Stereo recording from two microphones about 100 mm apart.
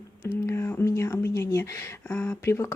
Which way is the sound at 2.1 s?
15° left (ahead or behind).